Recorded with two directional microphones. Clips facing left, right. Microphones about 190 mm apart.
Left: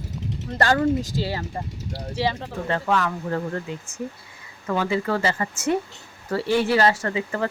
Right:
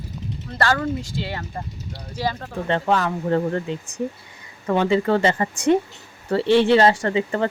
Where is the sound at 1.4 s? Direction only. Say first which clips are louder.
Left 1 dB; 25° left (ahead or behind).